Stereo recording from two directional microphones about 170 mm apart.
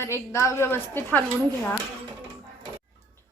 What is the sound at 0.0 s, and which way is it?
Speech, 15° left (ahead or behind).